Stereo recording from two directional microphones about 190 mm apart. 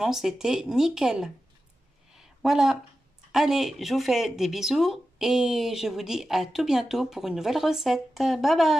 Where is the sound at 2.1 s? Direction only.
Centre (ahead or behind).